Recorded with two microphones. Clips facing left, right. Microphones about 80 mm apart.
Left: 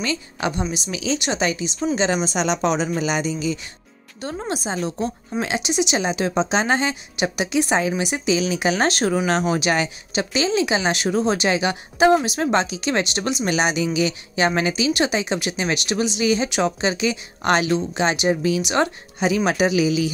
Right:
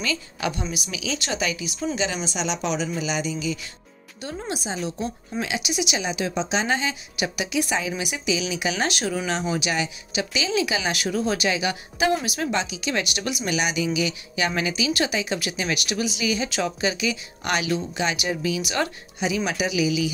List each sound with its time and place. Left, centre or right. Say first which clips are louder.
0.0 s a woman's voice: left 3 dB; left
2.2 s a woman's voice: left 6 dB; left
10.1 s a woman's voice: left 4 dB; left
19.1 s a woman's voice: left 6 dB; left